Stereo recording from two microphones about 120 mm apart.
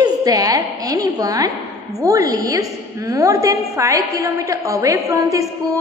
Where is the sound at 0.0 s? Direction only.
30° right (ahead or behind).